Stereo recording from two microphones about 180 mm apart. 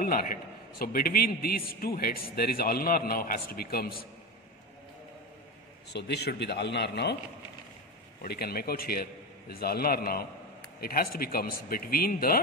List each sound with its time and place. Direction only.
0.0 s a man's voice: 55° left (ahead or behind)
5.9 s speech: 70° left (ahead or behind)
8.2 s a man's voice: 60° left (ahead or behind)